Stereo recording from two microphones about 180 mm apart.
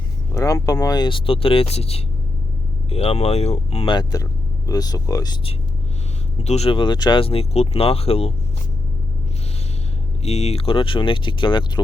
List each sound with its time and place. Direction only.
0.3 s speech: 20° left (ahead or behind)
6.4 s speech: 35° left (ahead or behind)
10.2 s speech: 35° left (ahead or behind)